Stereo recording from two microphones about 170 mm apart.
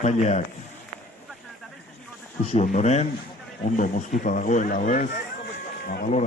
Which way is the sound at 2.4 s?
40° left (ahead or behind).